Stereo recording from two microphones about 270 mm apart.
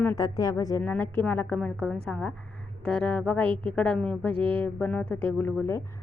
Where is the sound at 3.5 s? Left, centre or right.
Centre.